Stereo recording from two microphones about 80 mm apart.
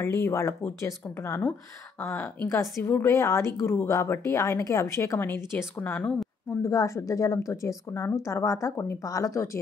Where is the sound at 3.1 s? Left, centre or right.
Left.